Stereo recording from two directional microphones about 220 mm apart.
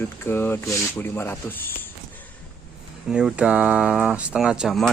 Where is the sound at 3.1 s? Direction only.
5° right (ahead or behind).